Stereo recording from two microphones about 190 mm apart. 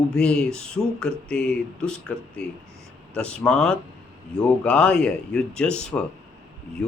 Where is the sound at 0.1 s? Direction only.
5° left (ahead or behind).